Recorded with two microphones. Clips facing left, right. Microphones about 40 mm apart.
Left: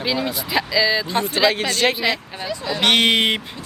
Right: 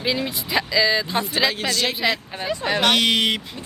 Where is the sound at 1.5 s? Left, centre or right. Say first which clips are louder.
Left 4 dB; left.